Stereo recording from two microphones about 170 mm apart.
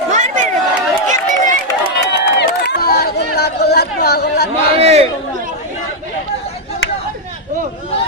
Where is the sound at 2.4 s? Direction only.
70° left (ahead or behind).